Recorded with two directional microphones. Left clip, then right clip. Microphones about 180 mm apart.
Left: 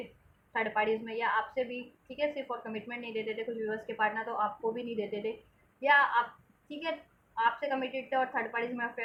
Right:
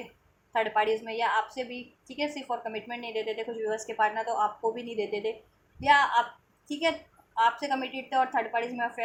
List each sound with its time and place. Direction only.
0.5 s a woman's voice: 35° right (ahead or behind)
7.3 s a woman's voice: 35° right (ahead or behind)